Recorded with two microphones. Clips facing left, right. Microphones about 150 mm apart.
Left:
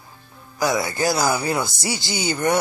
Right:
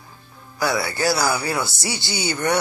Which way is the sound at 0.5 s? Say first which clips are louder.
Left 1 dB; 20° left (ahead or behind).